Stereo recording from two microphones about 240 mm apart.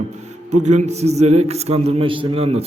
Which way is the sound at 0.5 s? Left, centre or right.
Right.